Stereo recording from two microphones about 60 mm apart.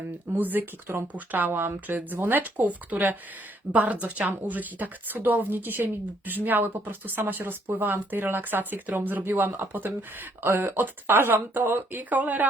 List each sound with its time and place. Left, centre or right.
0.3 s a woman's voice: right